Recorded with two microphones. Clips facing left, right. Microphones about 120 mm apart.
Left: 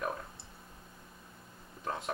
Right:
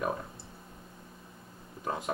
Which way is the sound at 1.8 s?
5° right (ahead or behind).